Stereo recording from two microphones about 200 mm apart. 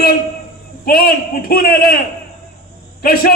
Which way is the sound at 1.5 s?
45° left (ahead or behind).